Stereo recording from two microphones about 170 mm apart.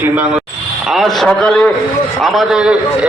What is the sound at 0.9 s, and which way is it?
A man's voice, centre (ahead or behind).